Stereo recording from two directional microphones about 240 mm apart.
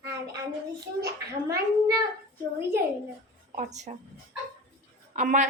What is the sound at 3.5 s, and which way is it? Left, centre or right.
Speech, right.